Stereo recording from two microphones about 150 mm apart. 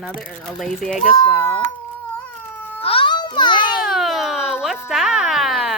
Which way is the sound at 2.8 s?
40° left (ahead or behind).